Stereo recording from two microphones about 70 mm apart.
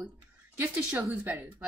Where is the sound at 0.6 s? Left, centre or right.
Right.